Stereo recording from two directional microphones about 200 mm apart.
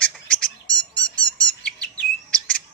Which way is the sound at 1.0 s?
5° left (ahead or behind).